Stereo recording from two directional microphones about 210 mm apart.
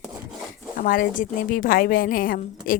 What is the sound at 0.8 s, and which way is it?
A woman's voice, 40° left (ahead or behind).